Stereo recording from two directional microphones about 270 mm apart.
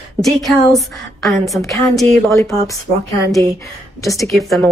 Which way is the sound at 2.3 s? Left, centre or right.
Centre.